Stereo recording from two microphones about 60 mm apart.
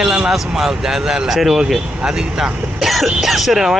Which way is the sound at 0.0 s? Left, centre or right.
Centre.